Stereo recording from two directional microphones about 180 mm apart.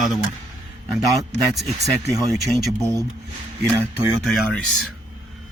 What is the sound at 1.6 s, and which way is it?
Speech, 35° right (ahead or behind).